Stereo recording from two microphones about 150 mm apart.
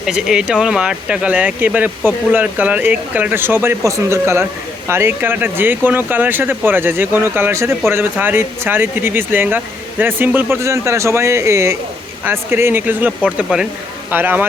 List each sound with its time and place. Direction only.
0.0 s speech: 5° right (ahead or behind)